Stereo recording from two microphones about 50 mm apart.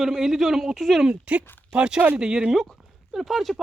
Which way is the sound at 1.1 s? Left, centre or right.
Right.